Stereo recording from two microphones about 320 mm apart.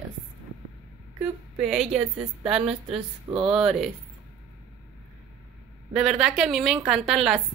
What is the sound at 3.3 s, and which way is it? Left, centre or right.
Speech, centre.